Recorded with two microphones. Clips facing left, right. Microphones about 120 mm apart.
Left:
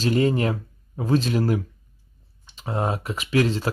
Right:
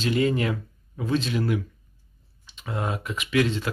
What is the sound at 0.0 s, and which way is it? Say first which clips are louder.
Speech: left 2 dB; 35° left (ahead or behind).